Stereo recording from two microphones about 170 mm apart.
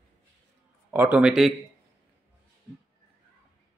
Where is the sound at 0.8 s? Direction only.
10° right (ahead or behind).